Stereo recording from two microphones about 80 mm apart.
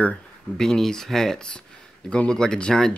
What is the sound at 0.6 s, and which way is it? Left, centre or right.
Speech, centre.